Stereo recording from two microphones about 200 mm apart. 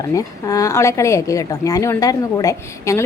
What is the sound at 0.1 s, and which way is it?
A woman's voice, 15° left (ahead or behind).